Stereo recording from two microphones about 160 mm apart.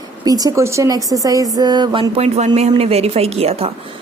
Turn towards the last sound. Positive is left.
turn(degrees=-40)  # may be behind; listen again after turning